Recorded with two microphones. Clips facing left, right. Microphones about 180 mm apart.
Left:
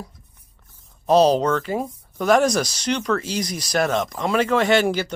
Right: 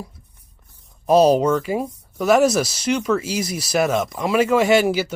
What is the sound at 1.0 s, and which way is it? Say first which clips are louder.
Speech: right 2 dB; 10° right (ahead or behind).